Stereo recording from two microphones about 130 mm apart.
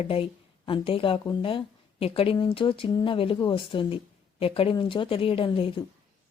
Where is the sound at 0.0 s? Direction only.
45° left (ahead or behind).